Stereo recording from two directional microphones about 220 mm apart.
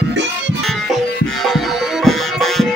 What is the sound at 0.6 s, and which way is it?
Music, centre (ahead or behind).